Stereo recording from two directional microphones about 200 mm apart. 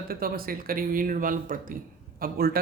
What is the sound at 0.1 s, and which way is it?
Speech, 50° right (ahead or behind).